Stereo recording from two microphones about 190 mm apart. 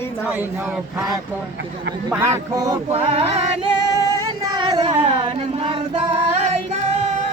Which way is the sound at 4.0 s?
20° right (ahead or behind).